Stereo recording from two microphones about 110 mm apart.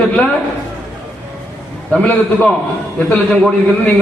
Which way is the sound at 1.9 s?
10° left (ahead or behind).